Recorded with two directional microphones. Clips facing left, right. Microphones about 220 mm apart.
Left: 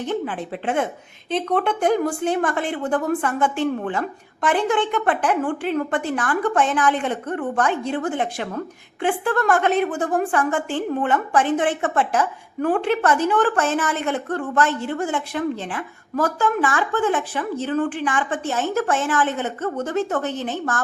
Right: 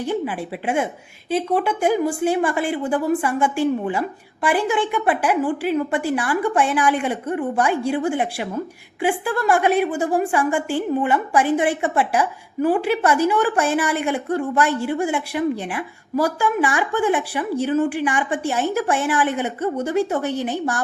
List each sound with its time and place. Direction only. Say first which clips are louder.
0.0 s a woman's voice: right 1 dB; 10° right (ahead or behind)